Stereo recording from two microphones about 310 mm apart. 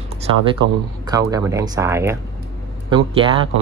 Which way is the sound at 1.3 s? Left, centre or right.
Centre.